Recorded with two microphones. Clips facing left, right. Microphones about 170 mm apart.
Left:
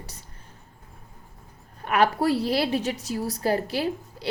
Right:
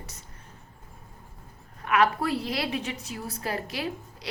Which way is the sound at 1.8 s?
35° left (ahead or behind).